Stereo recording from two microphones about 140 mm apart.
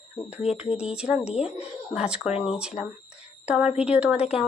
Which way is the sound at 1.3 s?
45° left (ahead or behind).